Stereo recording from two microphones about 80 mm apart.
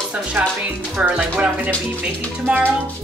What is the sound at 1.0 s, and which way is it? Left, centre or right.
Speech, centre.